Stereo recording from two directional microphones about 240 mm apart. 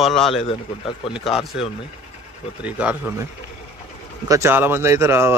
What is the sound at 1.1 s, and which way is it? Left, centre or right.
Speech, centre.